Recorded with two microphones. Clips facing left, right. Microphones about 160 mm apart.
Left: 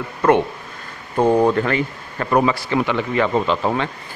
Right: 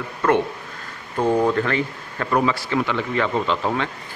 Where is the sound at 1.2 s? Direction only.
20° left (ahead or behind).